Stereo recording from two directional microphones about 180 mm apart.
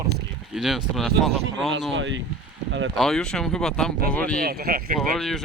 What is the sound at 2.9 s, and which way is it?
Speech, centre (ahead or behind).